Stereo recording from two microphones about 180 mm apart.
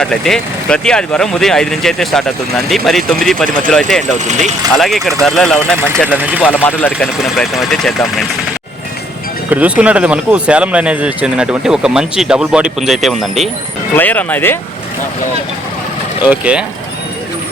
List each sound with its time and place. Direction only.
0.0 s speech: 5° left (ahead or behind)
4.3 s speech: 40° right (ahead or behind)
4.7 s speech: centre (ahead or behind)
7.2 s speech: centre (ahead or behind)
9.5 s speech: 10° right (ahead or behind); by 14.6 s 10° left (ahead or behind)
16.2 s speech: 10° right (ahead or behind)